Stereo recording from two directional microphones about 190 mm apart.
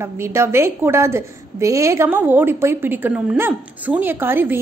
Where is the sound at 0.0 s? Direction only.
15° right (ahead or behind).